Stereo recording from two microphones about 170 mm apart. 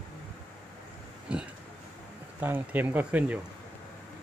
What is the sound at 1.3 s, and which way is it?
Speech, 5° right (ahead or behind).